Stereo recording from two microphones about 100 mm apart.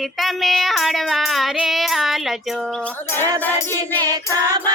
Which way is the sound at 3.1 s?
20° left (ahead or behind).